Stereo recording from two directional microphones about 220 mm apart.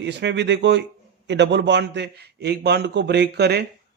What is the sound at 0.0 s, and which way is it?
A man's voice, 50° right (ahead or behind).